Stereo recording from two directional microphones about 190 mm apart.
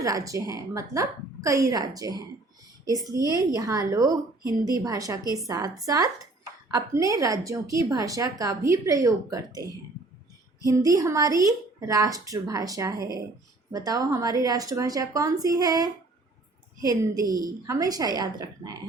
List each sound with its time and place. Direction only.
0.0 s a woman's voice: 15° right (ahead or behind)